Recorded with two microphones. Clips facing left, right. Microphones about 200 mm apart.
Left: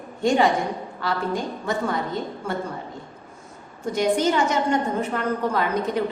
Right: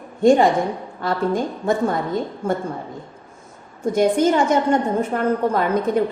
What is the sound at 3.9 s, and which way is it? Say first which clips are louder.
A woman's voice: right 4 dB; 50° right (ahead or behind).